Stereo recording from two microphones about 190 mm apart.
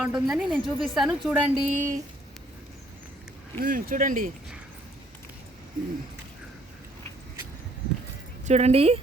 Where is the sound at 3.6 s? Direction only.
50° right (ahead or behind).